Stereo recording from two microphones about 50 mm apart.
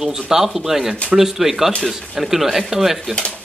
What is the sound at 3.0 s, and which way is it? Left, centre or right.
Speech, centre.